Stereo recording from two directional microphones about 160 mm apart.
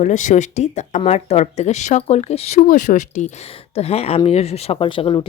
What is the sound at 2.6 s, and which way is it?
Speech, 55° left (ahead or behind).